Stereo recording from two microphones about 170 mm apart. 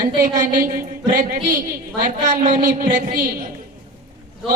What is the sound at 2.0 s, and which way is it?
Speech, 50° right (ahead or behind).